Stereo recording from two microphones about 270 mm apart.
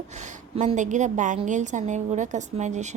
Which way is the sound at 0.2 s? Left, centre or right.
Right.